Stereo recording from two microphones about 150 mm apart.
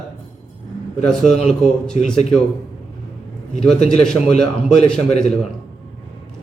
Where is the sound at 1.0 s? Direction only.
5° left (ahead or behind).